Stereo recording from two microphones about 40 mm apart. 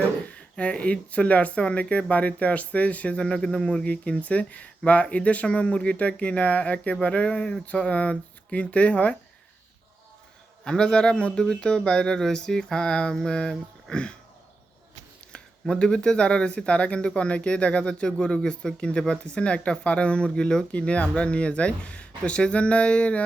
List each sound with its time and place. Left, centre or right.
0.3 s speech: left
3.2 s speech: left
3.8 s speech: left
5.6 s speech: left
7.3 s speech: centre
7.6 s speech: left
10.6 s speech: centre
15.6 s speech: left
20.7 s speech: left